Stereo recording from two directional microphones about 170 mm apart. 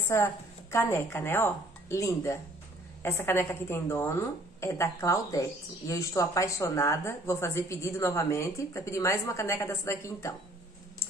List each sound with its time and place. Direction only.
0.1 s a woman's voice: 15° left (ahead or behind)